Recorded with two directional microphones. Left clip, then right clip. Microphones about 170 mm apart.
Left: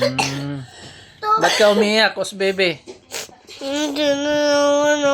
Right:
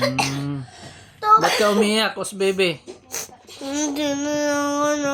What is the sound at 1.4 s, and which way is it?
Speech, 10° left (ahead or behind).